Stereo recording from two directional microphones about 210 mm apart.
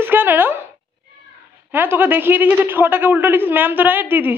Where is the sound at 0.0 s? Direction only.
10° right (ahead or behind).